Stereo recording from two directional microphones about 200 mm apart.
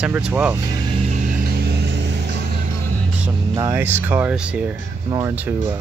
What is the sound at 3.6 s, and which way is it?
Speech, 15° right (ahead or behind).